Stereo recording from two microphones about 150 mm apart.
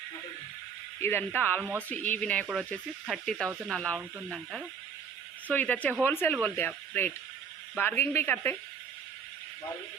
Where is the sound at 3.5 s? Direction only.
10° right (ahead or behind).